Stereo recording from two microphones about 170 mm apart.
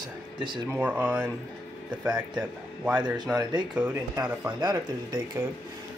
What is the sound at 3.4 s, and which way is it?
Speech, 20° right (ahead or behind).